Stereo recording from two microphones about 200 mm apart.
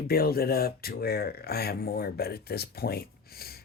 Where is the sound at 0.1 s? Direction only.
50° left (ahead or behind).